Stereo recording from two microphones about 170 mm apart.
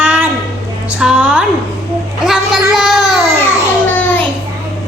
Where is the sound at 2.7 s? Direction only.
Centre (ahead or behind).